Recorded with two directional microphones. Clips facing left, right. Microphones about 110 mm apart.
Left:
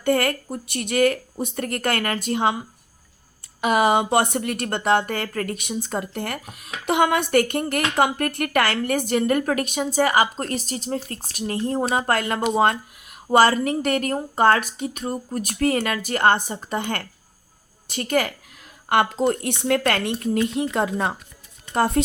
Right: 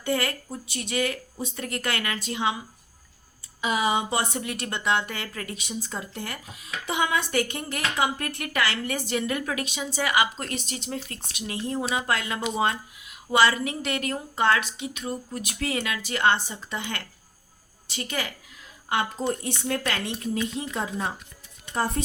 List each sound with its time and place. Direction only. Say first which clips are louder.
0.0 s speech: left 6 dB; 55° left (ahead or behind)
3.6 s speech: left 6 dB; 60° left (ahead or behind)
18.9 s speech: left 7 dB; 75° left (ahead or behind)
21.7 s speech: left 7 dB; 85° left